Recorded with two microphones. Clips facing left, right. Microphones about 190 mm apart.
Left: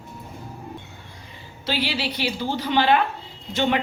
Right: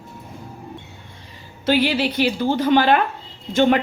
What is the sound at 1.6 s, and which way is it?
A woman's voice, 50° right (ahead or behind).